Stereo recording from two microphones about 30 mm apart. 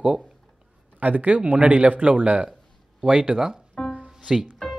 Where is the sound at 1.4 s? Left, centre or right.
Right.